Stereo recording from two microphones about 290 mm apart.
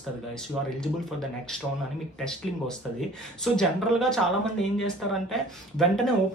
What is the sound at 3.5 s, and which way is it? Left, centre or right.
Speech, centre.